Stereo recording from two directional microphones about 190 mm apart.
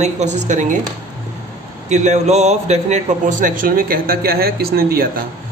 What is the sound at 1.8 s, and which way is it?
A man's voice, 40° right (ahead or behind).